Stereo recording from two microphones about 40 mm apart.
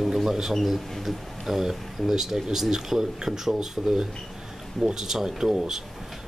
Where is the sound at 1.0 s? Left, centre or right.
Centre.